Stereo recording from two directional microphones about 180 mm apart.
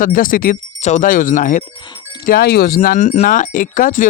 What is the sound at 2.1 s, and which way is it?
Speech, 55° left (ahead or behind).